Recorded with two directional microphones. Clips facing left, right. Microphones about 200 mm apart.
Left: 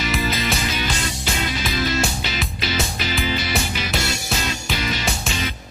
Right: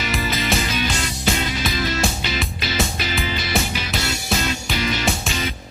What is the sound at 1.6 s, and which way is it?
Music, centre (ahead or behind).